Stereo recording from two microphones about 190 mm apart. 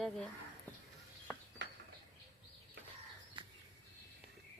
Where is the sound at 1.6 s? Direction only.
65° right (ahead or behind).